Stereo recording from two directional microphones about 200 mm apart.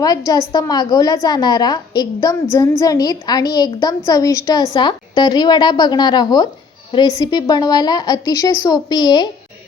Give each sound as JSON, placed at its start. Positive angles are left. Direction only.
{"t": 0.5, "sound": "a woman's voice", "side_deg": 20}